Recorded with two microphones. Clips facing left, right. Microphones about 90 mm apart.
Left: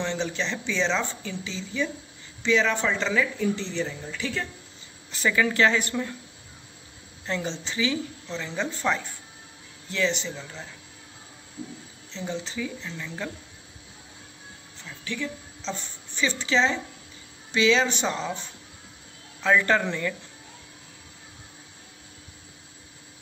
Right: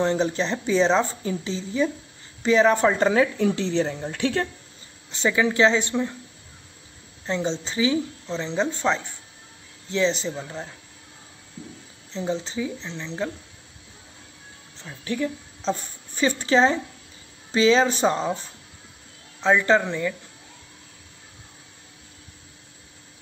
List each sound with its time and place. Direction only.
0.0 s speech: 40° right (ahead or behind)
3.3 s a woman's voice: 80° right; by 4.5 s 60° right (ahead or behind)
5.1 s a woman's voice: 25° right (ahead or behind)
7.2 s a woman's voice: 25° right (ahead or behind)
12.1 s a woman's voice: 35° right (ahead or behind)
14.8 s a woman's voice: 35° right (ahead or behind)
19.4 s speech: 20° right (ahead or behind)